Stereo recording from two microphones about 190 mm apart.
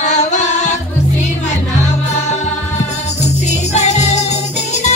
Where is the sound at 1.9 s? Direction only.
35° left (ahead or behind).